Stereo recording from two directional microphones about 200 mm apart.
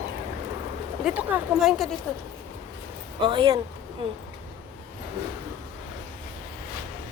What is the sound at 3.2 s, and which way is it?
Speech, 20° right (ahead or behind).